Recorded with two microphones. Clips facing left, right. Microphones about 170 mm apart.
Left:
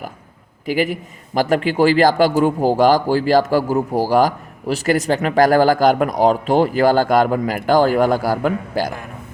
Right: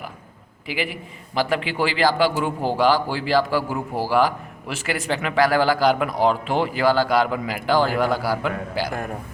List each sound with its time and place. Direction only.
0.6 s a man's voice: 45° left (ahead or behind)